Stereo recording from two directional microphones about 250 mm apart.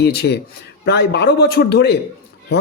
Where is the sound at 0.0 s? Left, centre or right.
Left.